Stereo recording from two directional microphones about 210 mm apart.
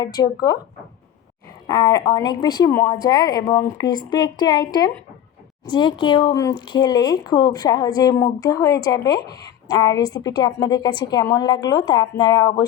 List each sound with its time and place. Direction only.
0.0 s speech: 20° left (ahead or behind)
1.6 s speech: 20° left (ahead or behind)